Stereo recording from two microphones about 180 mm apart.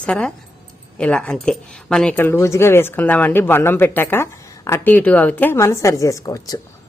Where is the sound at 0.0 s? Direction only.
5° left (ahead or behind).